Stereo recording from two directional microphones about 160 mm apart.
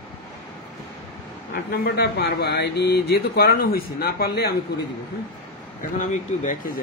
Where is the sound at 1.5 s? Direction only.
80° left.